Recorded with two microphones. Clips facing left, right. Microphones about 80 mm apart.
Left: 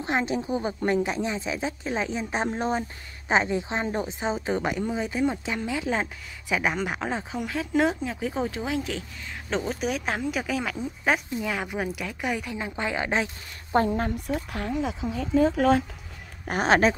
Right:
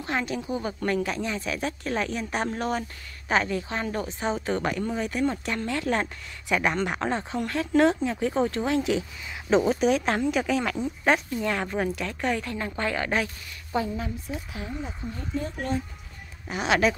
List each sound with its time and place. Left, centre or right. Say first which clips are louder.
0.0 s a woman's voice: left 3 dB; left
13.7 s a woman's voice: left 5 dB; left
16.4 s speech: left 3 dB; left